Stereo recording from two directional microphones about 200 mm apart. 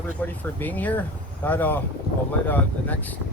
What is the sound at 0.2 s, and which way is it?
Speech, 10° left (ahead or behind).